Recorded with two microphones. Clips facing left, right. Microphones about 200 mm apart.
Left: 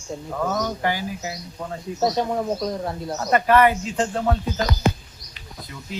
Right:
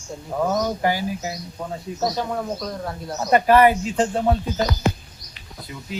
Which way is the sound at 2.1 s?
20° left (ahead or behind).